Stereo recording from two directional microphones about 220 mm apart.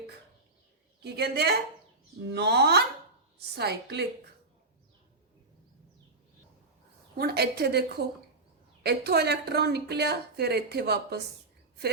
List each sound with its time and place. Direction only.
1.0 s speech: 50° right (ahead or behind)
7.2 s speech: 45° right (ahead or behind)